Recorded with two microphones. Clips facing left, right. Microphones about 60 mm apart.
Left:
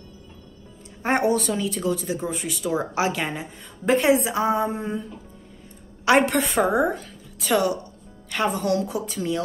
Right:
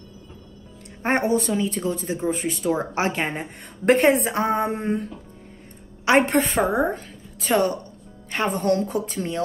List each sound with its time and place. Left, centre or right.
1.0 s a woman's voice: right
6.0 s a woman's voice: right